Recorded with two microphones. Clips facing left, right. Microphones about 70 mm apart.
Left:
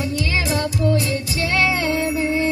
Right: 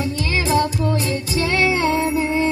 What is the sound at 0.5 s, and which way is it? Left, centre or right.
Music, right.